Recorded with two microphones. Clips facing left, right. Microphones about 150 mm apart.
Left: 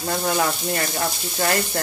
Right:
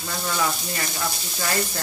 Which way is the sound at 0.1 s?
50° left (ahead or behind).